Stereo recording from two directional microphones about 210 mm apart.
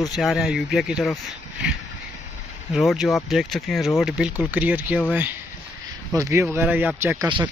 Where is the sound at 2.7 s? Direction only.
Centre (ahead or behind).